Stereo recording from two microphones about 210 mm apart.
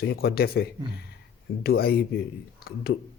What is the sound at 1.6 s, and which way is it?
Speech, 45° left (ahead or behind).